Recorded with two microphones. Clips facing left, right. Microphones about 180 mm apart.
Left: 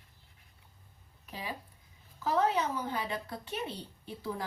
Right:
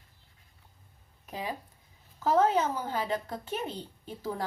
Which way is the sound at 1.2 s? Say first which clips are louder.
Right 5 dB; 40° right (ahead or behind).